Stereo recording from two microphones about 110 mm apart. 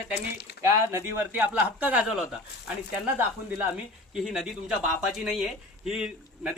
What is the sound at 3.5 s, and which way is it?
A man's voice, 10° right (ahead or behind).